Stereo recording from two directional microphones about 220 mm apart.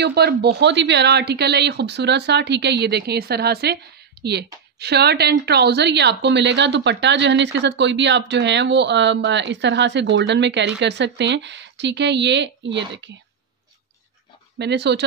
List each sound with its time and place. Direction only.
0.0 s speech: 45° right (ahead or behind)
14.6 s speech: 50° right (ahead or behind)